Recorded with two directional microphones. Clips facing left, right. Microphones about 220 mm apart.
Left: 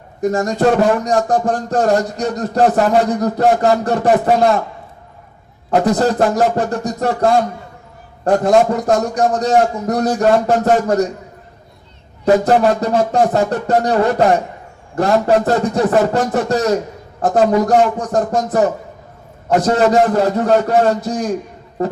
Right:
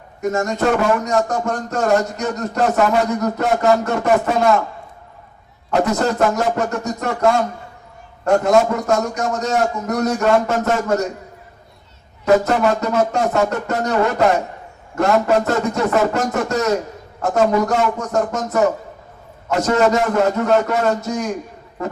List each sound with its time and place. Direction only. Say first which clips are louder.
0.2 s speech: left 4 dB; 35° left (ahead or behind)
5.8 s speech: left 2 dB; 35° left (ahead or behind)
12.2 s a man's voice: left 3 dB; 35° left (ahead or behind)